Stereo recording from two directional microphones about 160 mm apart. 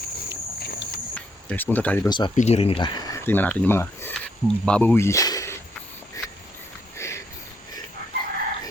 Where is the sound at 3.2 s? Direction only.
10° left (ahead or behind).